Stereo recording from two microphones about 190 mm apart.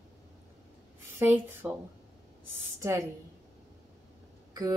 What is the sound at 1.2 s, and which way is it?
Speech, 10° right (ahead or behind).